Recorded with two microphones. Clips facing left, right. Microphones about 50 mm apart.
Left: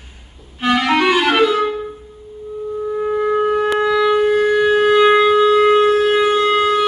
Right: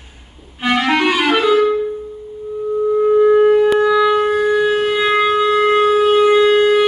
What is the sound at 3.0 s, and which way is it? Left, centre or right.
Wind instrument, centre.